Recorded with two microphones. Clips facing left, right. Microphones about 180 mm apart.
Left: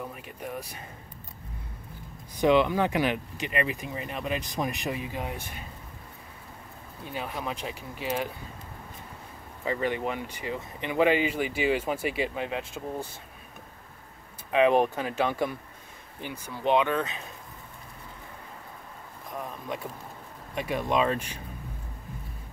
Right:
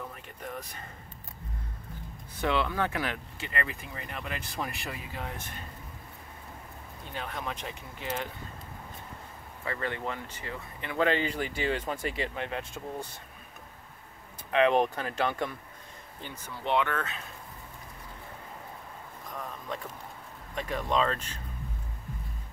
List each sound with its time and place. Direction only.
0.0 s speech: 10° left (ahead or behind)
2.3 s speech: 15° left (ahead or behind)
7.1 s speech: 10° left (ahead or behind)
9.7 s speech: 15° left (ahead or behind)
14.5 s speech: 10° left (ahead or behind)
19.3 s speech: 15° left (ahead or behind)